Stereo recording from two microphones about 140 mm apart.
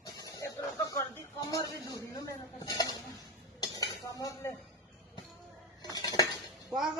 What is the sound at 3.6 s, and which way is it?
Dishes, 30° left (ahead or behind).